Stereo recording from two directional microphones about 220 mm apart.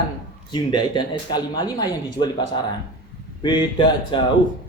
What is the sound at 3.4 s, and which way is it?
Speech, 20° left (ahead or behind).